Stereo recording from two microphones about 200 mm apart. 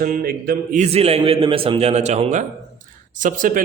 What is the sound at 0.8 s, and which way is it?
A man's voice, 30° right (ahead or behind).